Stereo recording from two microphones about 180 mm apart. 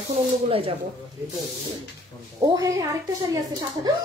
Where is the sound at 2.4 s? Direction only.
20° right (ahead or behind).